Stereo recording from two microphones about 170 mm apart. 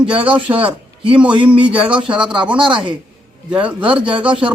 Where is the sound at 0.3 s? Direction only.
10° right (ahead or behind).